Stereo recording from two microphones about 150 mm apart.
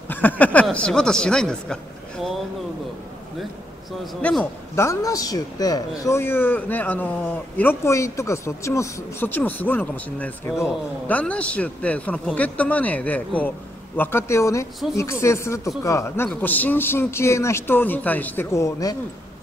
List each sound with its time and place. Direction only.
0.1 s speech: 10° left (ahead or behind)
4.0 s a man's voice: 5° left (ahead or behind)
4.7 s a man's voice: 20° left (ahead or behind)